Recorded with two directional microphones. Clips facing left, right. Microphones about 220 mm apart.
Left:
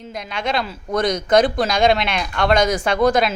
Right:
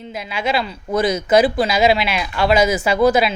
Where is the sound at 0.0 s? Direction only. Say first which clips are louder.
Right 2 dB; 5° right (ahead or behind).